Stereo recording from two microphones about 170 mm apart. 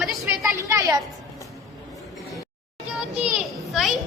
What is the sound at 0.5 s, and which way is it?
Speech, 20° right (ahead or behind).